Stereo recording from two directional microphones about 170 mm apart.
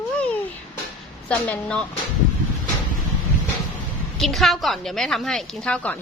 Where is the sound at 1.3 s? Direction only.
5° left (ahead or behind).